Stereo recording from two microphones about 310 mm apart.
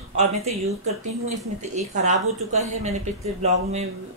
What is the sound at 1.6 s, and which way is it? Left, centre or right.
Speech, right.